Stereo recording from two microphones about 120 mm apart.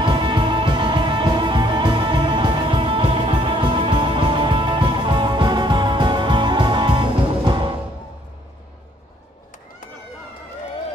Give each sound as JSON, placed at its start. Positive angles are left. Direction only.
{"t": 0.0, "sound": "music", "side_deg": -40}